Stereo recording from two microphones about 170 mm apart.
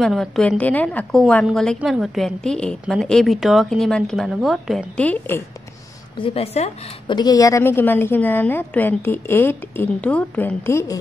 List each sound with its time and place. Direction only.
0.0 s a woman's voice: 5° left (ahead or behind)
6.1 s a woman's voice: 35° left (ahead or behind)
7.2 s a woman's voice: 20° left (ahead or behind)